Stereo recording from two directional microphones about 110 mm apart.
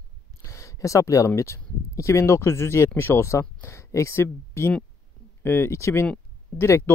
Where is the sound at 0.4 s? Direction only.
30° left (ahead or behind).